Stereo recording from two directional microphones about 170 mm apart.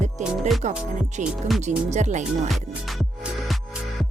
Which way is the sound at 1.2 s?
45° right (ahead or behind).